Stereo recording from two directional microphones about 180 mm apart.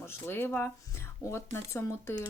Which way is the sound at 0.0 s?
10° left (ahead or behind).